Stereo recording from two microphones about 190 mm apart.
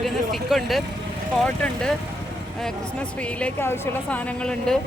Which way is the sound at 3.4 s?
10° left (ahead or behind).